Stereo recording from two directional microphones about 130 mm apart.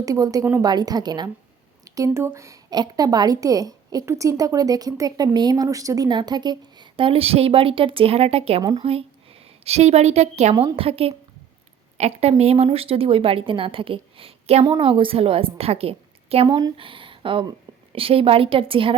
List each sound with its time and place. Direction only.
0.0 s a woman's voice: 25° right (ahead or behind); by 10.5 s 55° right (ahead or behind)
10.8 s a woman's voice: 45° right (ahead or behind)
16.5 s a woman's voice: 30° right (ahead or behind)
16.7 s a woman's voice: 40° right (ahead or behind)